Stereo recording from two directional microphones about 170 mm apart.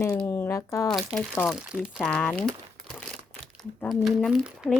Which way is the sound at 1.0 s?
Centre (ahead or behind).